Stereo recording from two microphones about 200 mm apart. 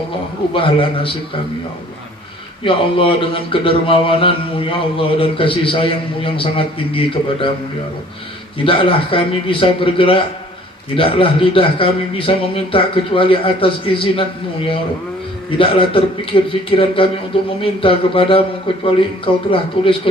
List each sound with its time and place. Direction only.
0.5 s a man's voice: 25° left (ahead or behind)
2.6 s a man's voice: 25° left (ahead or behind)
8.6 s a man's voice: 25° left (ahead or behind)
15.4 s a man's voice: 25° left (ahead or behind)